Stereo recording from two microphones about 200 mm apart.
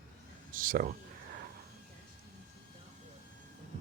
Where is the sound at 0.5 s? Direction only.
45° right (ahead or behind).